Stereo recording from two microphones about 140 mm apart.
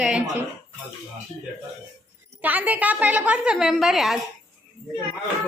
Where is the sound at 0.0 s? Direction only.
5° right (ahead or behind).